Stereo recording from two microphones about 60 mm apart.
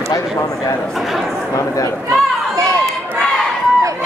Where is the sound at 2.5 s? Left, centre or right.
Right.